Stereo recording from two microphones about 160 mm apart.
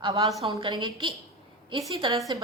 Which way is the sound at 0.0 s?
25° right (ahead or behind).